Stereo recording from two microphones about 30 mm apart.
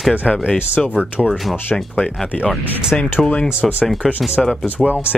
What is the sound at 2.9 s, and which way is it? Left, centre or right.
Speech, left.